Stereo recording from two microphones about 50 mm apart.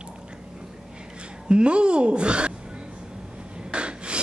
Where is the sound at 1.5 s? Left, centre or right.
Right.